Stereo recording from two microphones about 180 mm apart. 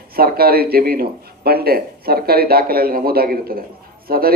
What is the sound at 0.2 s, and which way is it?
A man's voice, 55° right (ahead or behind).